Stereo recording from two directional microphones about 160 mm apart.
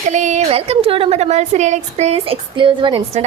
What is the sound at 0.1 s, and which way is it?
A woman's voice, 50° right (ahead or behind).